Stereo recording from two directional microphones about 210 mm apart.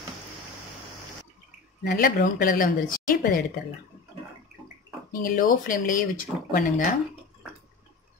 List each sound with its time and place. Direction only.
1.9 s speech: 45° left (ahead or behind)
5.2 s speech: 40° left (ahead or behind)